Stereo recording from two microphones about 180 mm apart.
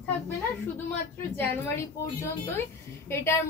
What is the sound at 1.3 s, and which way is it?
A woman's voice, 15° left (ahead or behind).